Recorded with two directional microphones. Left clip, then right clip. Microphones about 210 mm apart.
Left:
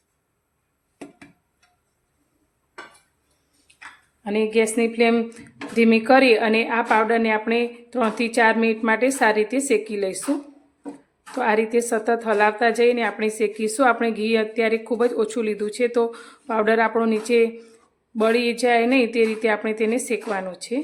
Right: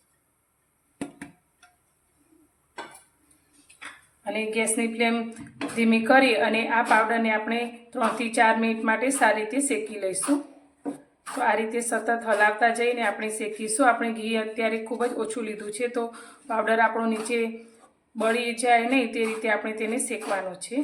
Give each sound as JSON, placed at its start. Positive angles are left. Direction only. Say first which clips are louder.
{"t": 4.2, "sound": "speech", "louder": "left 7 dB", "side_deg": 50}
{"t": 11.3, "sound": "speech", "louder": "left 4 dB", "side_deg": 50}